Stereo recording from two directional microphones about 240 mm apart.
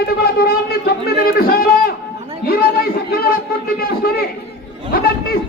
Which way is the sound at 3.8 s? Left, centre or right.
Left.